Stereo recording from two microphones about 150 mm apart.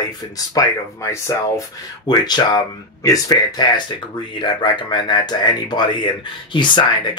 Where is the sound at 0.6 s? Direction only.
20° left (ahead or behind).